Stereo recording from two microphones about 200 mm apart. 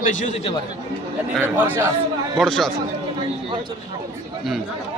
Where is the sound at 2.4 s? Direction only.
Centre (ahead or behind).